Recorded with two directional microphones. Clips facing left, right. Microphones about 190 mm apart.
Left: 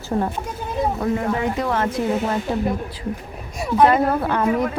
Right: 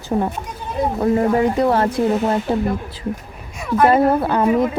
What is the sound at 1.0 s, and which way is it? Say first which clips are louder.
Speech: right 10 dB; 35° right (ahead or behind).